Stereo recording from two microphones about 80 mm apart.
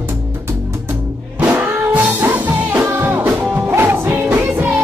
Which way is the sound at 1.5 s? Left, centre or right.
Right.